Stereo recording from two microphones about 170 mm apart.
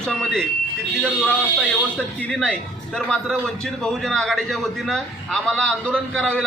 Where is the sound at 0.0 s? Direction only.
5° left (ahead or behind).